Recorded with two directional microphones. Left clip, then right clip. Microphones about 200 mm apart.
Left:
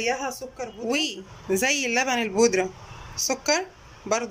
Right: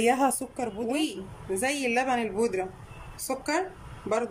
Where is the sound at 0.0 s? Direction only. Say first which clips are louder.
Right 3 dB; 30° right (ahead or behind).